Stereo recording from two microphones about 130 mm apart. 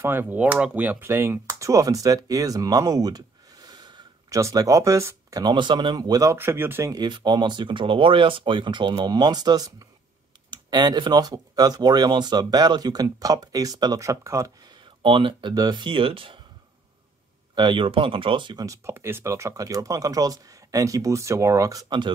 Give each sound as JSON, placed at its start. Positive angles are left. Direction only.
{"t": 0.0, "sound": "speech", "side_deg": -15}
{"t": 1.5, "sound": "a sound", "side_deg": -25}
{"t": 4.4, "sound": "speech", "side_deg": -25}
{"t": 5.4, "sound": "speech", "side_deg": -35}
{"t": 6.3, "sound": "speech", "side_deg": -15}
{"t": 6.9, "sound": "speech", "side_deg": -35}
{"t": 15.0, "sound": "speech", "side_deg": -40}
{"t": 17.6, "sound": "speech", "side_deg": -40}
{"t": 18.9, "sound": "speech", "side_deg": -20}